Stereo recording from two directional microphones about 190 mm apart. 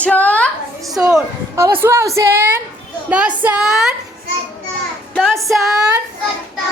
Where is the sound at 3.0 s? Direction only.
5° right (ahead or behind).